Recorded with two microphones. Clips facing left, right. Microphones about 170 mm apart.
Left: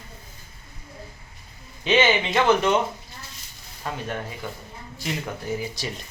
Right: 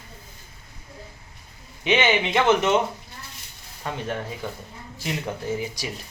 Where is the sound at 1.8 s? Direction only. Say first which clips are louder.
Left 1 dB; 20° right (ahead or behind).